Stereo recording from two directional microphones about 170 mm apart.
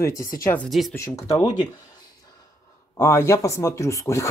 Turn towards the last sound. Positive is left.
turn(degrees=20)  # may be behind; listen again after turning